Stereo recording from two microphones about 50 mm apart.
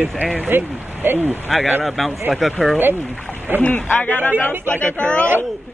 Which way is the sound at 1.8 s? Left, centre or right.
Centre.